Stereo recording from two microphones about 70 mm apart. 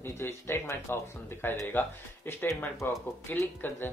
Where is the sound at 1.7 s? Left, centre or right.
Left.